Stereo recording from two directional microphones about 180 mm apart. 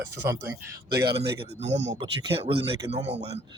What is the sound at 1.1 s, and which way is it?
Speech, 35° right (ahead or behind).